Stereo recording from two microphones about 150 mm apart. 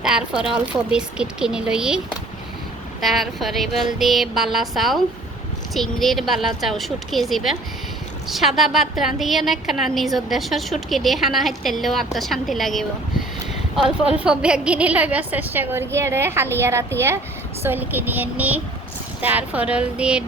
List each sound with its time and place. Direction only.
0.0 s a woman's voice: 5° right (ahead or behind)
3.0 s a woman's voice: centre (ahead or behind)
14.3 s a woman's voice: 5° right (ahead or behind)